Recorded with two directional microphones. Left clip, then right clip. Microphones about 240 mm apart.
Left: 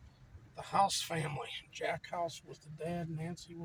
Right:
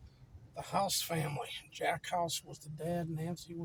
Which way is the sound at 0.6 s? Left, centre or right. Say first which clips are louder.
Left 3 dB; centre.